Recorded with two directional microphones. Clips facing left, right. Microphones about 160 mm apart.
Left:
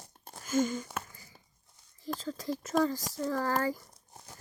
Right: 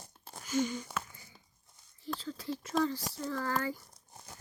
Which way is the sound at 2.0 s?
40° left (ahead or behind).